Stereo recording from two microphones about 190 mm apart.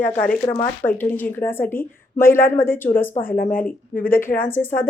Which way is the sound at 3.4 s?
45° left (ahead or behind).